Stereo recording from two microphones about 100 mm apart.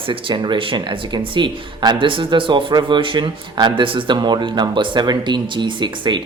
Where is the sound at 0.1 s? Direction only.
55° right (ahead or behind).